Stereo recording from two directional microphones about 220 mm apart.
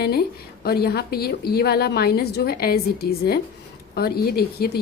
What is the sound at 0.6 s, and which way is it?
A woman's voice, 45° left (ahead or behind).